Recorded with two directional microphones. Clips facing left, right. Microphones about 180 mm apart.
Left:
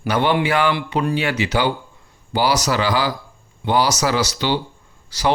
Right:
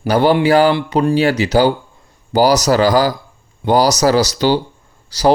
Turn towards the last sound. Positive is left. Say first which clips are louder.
# right 7 dB
turn(degrees=-35)  # may be behind; listen again after turning